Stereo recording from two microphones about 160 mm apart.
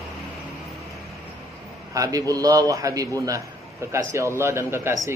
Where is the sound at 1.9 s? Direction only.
20° right (ahead or behind).